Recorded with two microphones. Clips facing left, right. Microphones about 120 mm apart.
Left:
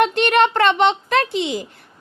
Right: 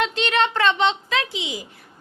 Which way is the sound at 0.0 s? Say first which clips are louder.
Left 6 dB; 55° left (ahead or behind).